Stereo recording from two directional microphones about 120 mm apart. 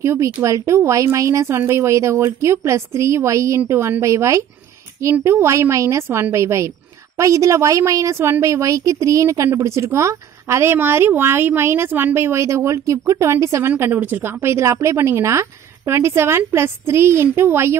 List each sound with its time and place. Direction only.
0.0 s a woman's voice: 25° right (ahead or behind)